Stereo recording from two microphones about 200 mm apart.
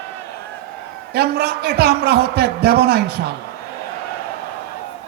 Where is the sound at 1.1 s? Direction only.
55° right (ahead or behind).